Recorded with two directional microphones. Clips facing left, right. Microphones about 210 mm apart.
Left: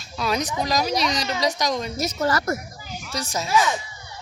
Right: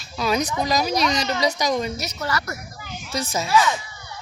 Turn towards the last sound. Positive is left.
turn(degrees=15)  # may be behind; listen again after turning